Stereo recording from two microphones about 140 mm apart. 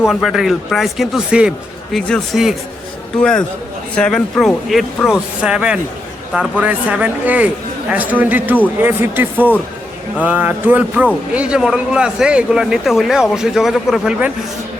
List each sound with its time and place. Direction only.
0.1 s a man's voice: centre (ahead or behind)